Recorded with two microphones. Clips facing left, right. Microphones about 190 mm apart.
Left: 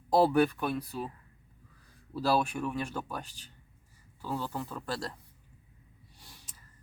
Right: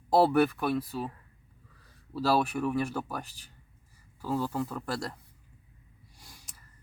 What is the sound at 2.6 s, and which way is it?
Speech, 10° right (ahead or behind).